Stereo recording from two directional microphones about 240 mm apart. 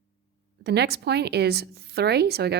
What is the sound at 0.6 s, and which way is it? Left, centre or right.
A woman's voice, right.